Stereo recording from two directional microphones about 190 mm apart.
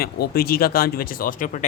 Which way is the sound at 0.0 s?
50° left (ahead or behind).